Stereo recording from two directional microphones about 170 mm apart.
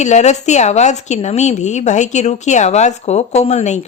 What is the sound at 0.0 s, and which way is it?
A woman's voice, 45° left (ahead or behind).